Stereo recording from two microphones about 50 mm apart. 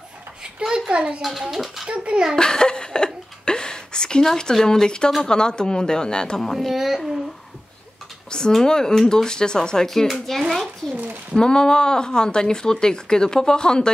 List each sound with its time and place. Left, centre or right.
0.4 s speech: centre
1.5 s a child's voice: centre
1.9 s a child's voice: right
2.3 s a sound: centre
4.3 s speech: centre
6.5 s a child's voice: centre
8.3 s a child's voice: centre
11.3 s speech: centre